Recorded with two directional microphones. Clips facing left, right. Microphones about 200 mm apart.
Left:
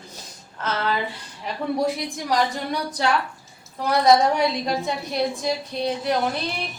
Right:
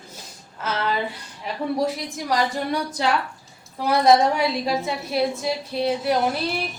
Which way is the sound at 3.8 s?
5° right (ahead or behind).